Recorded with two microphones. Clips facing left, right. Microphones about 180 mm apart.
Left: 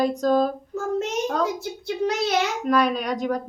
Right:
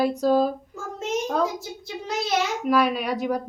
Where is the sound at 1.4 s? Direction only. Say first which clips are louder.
Left 1 dB; 65° left (ahead or behind).